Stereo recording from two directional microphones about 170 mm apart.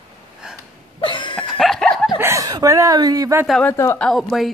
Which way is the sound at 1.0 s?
30° left (ahead or behind).